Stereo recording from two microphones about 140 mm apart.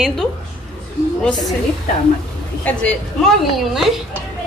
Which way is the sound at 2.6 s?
5° left (ahead or behind).